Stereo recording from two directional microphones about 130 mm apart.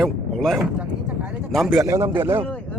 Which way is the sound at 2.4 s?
10° left (ahead or behind).